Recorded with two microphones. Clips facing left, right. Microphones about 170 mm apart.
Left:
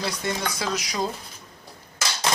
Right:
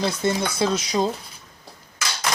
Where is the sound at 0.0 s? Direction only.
25° right (ahead or behind).